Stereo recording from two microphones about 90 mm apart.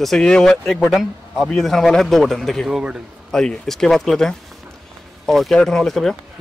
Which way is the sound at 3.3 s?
5° left (ahead or behind).